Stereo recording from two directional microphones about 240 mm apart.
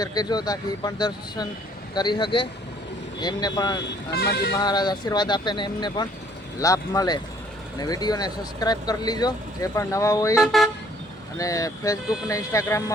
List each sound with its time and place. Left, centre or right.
0.0 s speech: centre
3.8 s speech: left
4.5 s speech: centre
10.4 s car: centre
11.3 s speech: centre